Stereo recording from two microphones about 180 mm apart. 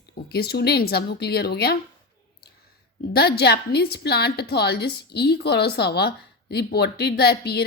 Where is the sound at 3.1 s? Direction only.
60° left (ahead or behind).